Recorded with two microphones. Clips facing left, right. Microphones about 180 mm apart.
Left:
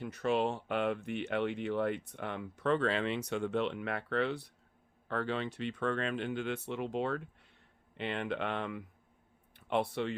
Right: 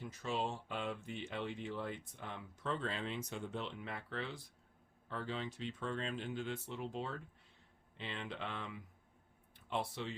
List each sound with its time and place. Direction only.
0.0 s speech: 65° left (ahead or behind)